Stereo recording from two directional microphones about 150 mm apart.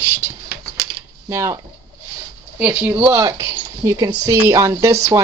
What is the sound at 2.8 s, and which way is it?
Speech, 10° right (ahead or behind).